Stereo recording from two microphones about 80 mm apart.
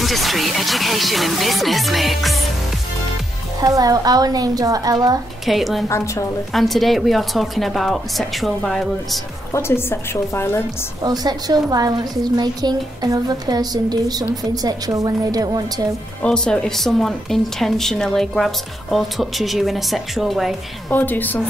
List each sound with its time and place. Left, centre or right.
0.0 s speech: centre
3.6 s speech: right
5.4 s speech: centre
5.9 s a woman's voice: left
6.5 s speech: centre
9.5 s a woman's voice: left
11.1 s a woman's voice: right
16.2 s speech: centre
20.9 s speech: left